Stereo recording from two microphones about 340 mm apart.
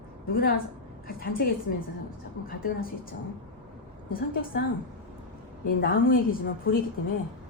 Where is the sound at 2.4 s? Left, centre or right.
Left.